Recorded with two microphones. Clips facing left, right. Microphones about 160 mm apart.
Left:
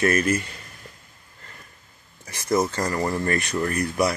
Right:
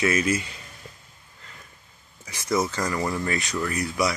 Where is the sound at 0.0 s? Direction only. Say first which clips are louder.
Left 2 dB; 55° left (ahead or behind).